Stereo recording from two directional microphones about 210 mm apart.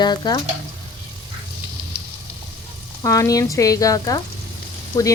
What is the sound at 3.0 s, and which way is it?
Speech, 15° left (ahead or behind).